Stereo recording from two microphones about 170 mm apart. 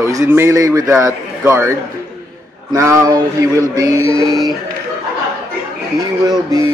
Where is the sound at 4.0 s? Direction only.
30° left (ahead or behind).